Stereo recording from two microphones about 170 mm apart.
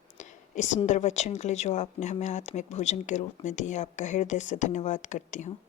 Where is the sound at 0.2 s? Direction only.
45° left (ahead or behind).